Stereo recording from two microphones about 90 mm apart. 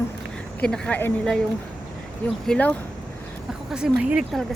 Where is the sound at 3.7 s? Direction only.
10° right (ahead or behind).